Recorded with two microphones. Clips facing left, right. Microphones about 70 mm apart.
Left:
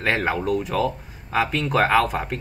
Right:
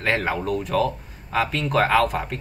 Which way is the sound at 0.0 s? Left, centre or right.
Centre.